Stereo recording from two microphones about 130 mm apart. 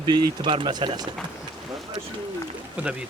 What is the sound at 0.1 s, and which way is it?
Speech, 40° right (ahead or behind).